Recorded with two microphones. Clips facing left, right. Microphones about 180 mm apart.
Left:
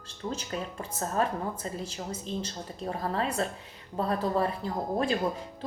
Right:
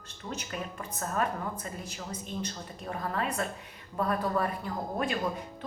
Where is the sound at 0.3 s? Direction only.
30° left (ahead or behind).